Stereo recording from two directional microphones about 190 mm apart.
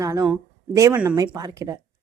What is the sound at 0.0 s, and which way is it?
Speech, 15° right (ahead or behind).